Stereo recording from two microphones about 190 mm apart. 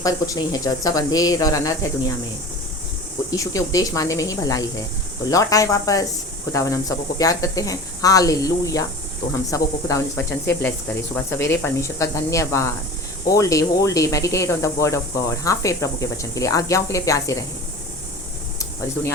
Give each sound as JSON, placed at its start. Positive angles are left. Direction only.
{"t": 0.0, "sound": "speech", "side_deg": 20}
{"t": 3.2, "sound": "speech", "side_deg": 15}